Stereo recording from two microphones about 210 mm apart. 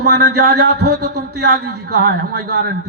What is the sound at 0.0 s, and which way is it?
Speech, 50° right (ahead or behind).